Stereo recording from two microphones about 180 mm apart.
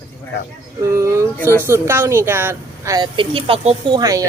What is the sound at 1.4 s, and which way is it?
Speech, 10° left (ahead or behind).